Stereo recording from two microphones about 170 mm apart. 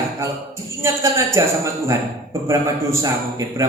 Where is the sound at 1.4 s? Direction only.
15° right (ahead or behind).